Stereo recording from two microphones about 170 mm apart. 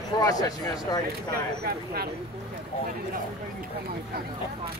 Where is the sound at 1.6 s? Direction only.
65° right (ahead or behind).